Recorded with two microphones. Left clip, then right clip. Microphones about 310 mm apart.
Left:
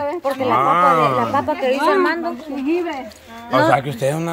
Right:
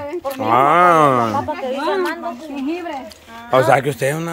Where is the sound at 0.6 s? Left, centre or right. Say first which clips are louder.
Right 3 dB; centre.